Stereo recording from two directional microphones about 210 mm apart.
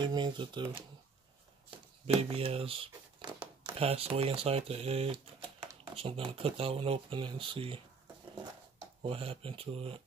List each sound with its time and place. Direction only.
0.0 s speech: 20° right (ahead or behind)
2.0 s speech: 25° right (ahead or behind)
9.0 s speech: 25° right (ahead or behind)